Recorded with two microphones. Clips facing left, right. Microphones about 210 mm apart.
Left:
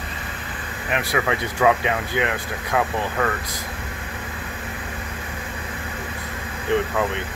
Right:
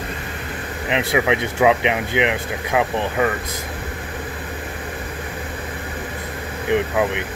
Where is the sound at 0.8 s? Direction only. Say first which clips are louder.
Right 4 dB; 20° right (ahead or behind).